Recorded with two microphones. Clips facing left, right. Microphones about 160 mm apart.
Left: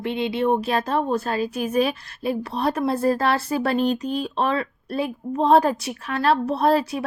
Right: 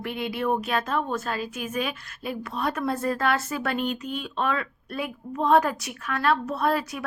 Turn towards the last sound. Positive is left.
turn(degrees=30)  # may be behind; listen again after turning